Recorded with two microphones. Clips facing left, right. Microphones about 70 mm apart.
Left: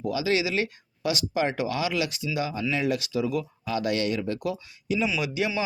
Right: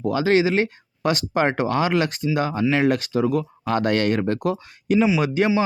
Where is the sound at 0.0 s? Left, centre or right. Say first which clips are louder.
Right 7 dB; right.